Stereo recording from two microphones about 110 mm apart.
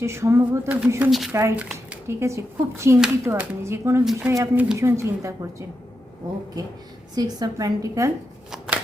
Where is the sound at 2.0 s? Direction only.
25° right (ahead or behind).